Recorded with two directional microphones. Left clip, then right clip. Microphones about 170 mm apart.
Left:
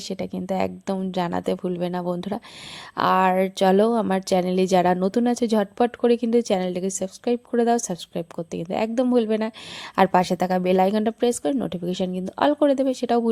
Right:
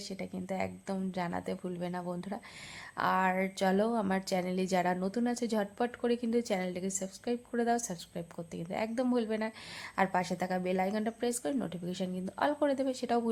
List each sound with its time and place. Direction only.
0.1 s speech: 50° left (ahead or behind)